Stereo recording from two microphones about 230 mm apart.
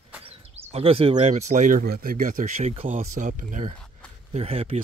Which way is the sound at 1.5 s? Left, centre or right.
Right.